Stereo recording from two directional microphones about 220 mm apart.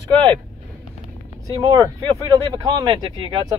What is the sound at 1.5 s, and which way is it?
Speech, 20° right (ahead or behind).